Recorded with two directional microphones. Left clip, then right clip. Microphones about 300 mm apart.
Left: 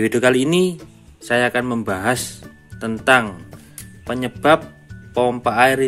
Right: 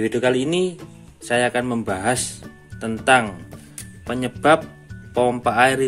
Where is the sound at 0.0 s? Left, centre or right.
Centre.